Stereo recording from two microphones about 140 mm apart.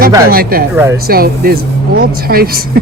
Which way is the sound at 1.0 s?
90° right.